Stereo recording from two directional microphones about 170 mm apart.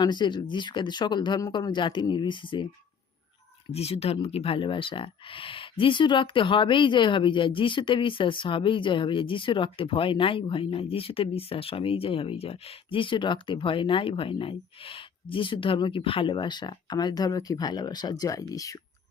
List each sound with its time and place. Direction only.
0.0 s speech: 25° left (ahead or behind)
3.7 s speech: 35° left (ahead or behind); by 18.8 s 20° left (ahead or behind)